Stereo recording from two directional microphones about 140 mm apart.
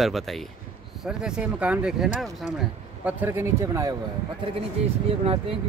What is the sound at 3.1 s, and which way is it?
Speech, 15° right (ahead or behind).